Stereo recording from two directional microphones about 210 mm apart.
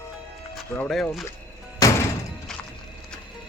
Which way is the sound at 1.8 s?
15° left (ahead or behind).